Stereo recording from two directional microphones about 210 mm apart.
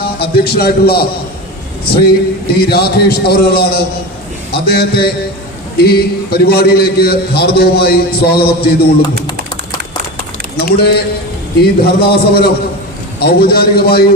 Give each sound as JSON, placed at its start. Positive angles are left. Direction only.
{"t": 0.0, "sound": "a man's voice", "side_deg": 50}
{"t": 2.5, "sound": "a man's voice", "side_deg": 50}
{"t": 10.6, "sound": "a man's voice", "side_deg": 50}